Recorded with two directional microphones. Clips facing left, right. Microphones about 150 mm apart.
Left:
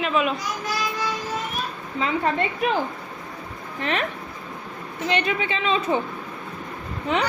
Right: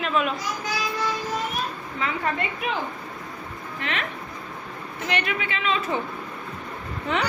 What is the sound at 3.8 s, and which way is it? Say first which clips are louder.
Speech: left 5 dB; 35° left (ahead or behind).